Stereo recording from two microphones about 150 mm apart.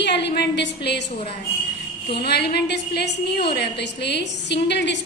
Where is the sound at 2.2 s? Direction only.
90° left.